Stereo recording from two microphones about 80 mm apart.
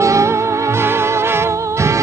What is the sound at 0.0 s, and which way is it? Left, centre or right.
Music, right.